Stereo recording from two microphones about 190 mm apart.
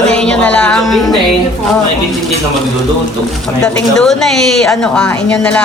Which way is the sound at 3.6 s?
5° left (ahead or behind).